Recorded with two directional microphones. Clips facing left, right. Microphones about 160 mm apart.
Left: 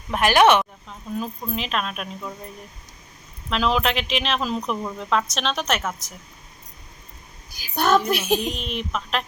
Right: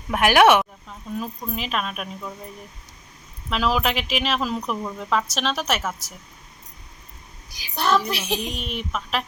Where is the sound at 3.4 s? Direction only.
5° right (ahead or behind).